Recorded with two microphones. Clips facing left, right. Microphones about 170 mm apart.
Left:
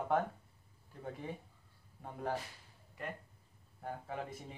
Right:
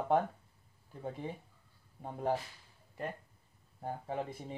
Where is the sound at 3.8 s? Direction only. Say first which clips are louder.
Right 4 dB; 30° right (ahead or behind).